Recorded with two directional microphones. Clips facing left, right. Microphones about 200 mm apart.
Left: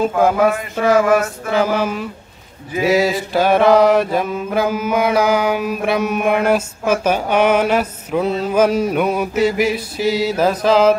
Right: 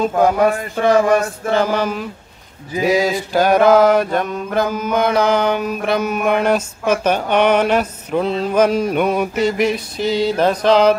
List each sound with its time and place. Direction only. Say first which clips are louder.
0.2 s mantra: right 1 dB; 5° left (ahead or behind)